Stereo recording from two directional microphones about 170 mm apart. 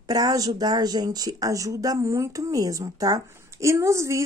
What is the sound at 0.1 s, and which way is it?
Speech, 20° right (ahead or behind).